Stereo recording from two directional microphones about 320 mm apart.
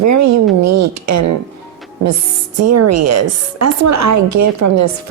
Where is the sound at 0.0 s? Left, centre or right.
Right.